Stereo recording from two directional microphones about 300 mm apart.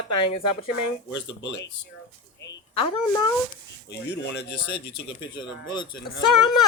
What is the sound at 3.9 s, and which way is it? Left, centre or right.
Speech, left.